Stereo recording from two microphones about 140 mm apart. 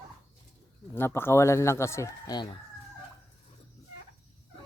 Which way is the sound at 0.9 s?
15° left (ahead or behind).